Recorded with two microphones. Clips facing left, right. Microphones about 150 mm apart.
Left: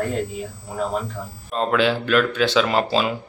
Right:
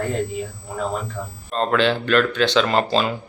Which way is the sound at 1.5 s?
5° left (ahead or behind).